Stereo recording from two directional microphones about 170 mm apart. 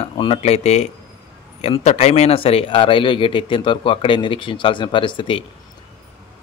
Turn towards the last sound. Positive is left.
turn(degrees=30)  # may be behind; listen again after turning